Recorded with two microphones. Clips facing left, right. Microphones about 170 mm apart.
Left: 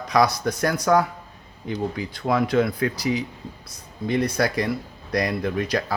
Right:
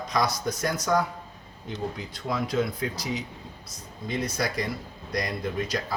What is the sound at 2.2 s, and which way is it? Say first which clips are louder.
Speech: left 6 dB; 65° left (ahead or behind).